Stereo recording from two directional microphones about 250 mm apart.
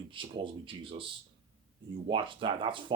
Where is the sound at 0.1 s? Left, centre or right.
Centre.